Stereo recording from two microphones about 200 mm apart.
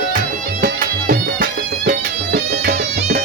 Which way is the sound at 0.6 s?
45° right (ahead or behind).